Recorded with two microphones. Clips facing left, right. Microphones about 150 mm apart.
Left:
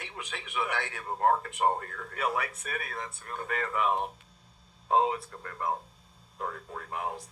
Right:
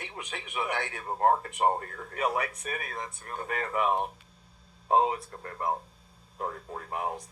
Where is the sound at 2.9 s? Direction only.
25° right (ahead or behind).